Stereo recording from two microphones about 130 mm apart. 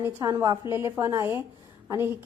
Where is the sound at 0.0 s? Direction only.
20° right (ahead or behind).